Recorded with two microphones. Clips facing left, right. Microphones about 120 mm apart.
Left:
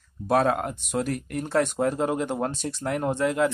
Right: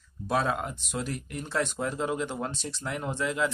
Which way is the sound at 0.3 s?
50° left (ahead or behind).